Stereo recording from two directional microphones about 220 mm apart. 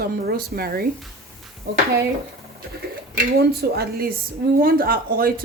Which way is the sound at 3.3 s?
45° right (ahead or behind).